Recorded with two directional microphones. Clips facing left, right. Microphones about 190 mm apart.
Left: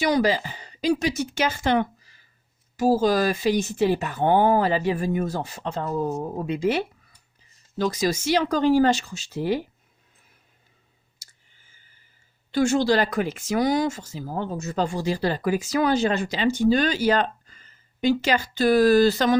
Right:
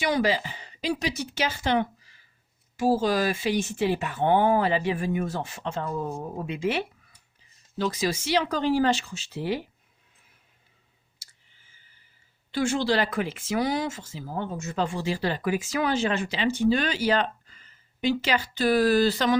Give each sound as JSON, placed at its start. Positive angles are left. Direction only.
{"t": 0.0, "sound": "speech", "side_deg": 40}
{"t": 12.5, "sound": "speech", "side_deg": 45}